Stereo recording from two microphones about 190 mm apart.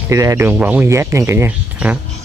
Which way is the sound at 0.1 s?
15° right (ahead or behind).